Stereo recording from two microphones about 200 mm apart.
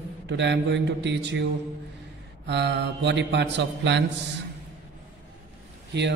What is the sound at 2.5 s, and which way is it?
A man's voice, 60° right (ahead or behind).